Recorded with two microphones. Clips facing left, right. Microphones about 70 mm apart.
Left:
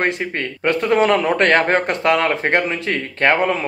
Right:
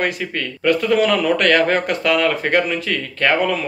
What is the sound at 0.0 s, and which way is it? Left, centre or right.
Speech, left.